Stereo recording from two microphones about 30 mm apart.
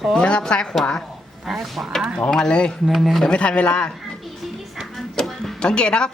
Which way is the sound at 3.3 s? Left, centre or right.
Left.